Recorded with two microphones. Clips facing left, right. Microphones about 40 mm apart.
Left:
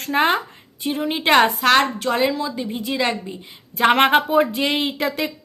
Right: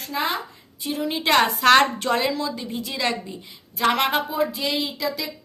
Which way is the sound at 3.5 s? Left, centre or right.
Left.